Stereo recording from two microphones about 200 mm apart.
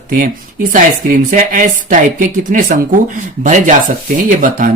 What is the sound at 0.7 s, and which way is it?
Speech, 40° right (ahead or behind).